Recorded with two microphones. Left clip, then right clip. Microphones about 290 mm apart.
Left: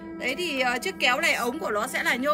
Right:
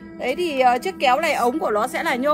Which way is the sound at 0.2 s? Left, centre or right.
Centre.